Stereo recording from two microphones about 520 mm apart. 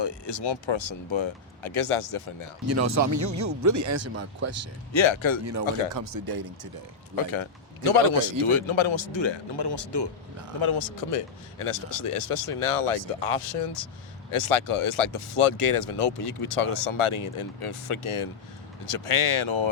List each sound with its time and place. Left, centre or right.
0.0 s speech: left
2.6 s speech: right
4.9 s speech: left
5.9 s speech: right
7.9 s speech: left
10.6 s speech: left
14.3 s speech: left